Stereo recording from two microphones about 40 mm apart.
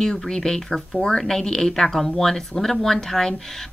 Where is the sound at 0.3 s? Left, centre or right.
Centre.